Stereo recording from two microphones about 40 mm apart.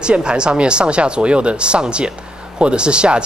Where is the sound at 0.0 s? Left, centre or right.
Right.